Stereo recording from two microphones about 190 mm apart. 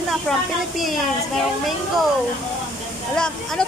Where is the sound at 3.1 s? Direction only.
5° left (ahead or behind).